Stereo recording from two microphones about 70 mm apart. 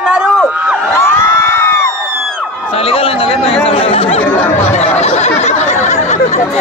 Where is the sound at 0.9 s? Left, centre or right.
Left.